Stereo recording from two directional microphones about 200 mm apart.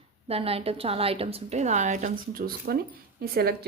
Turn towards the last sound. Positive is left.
turn(degrees=-50)  # may be behind; listen again after turning